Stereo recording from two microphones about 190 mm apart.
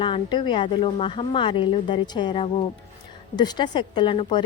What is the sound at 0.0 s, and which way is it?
A woman's voice, 25° left (ahead or behind).